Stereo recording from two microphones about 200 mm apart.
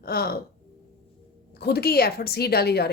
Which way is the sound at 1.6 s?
55° left (ahead or behind).